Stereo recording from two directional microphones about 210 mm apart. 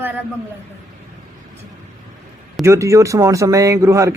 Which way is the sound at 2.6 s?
15° right (ahead or behind).